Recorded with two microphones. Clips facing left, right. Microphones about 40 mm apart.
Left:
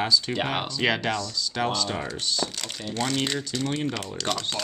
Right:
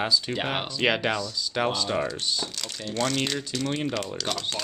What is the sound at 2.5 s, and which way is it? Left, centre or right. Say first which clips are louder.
Speech: left 1 dB; centre.